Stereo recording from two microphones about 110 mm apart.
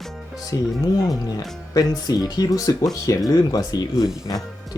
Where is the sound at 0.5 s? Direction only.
30° left (ahead or behind).